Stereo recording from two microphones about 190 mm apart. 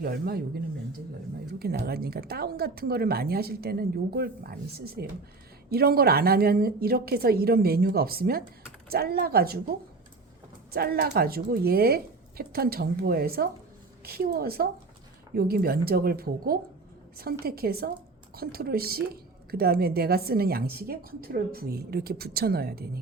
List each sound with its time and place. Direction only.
0.0 s a woman's voice: 55° right (ahead or behind)
10.7 s a woman's voice: 55° right (ahead or behind)